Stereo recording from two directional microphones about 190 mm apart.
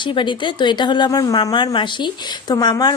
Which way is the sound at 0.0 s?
25° left (ahead or behind).